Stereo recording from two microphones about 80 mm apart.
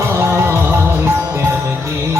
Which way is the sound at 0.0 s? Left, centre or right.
Right.